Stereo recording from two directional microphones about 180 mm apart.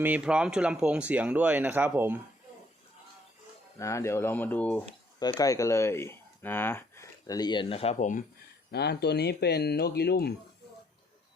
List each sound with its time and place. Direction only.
0.0 s speech: 5° right (ahead or behind)
3.8 s speech: 15° left (ahead or behind)
5.2 s speech: 20° left (ahead or behind); by 8.2 s 45° left (ahead or behind)
8.7 s speech: 65° left (ahead or behind)